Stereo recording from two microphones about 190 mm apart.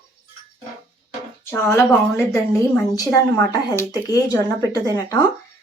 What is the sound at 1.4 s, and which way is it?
A woman's voice, 15° left (ahead or behind).